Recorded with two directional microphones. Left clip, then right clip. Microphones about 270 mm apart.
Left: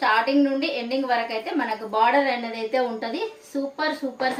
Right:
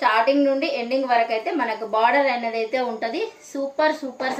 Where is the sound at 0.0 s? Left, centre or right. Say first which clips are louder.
Right 2 dB; centre.